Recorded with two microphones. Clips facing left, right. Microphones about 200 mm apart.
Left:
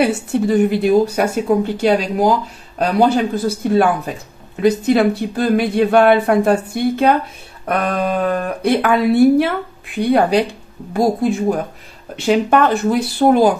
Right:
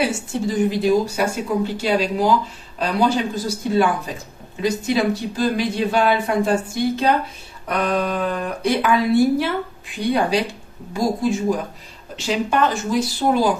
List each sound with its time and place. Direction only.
0.0 s speech: 60° left (ahead or behind)